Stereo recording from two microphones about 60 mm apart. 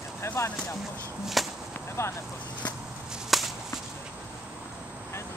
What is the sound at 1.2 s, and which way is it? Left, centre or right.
Whip, centre.